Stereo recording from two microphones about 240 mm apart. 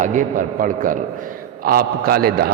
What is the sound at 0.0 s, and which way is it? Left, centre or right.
A man's voice, right.